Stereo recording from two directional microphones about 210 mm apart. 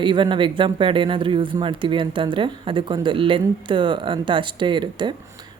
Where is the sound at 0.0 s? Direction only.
20° right (ahead or behind).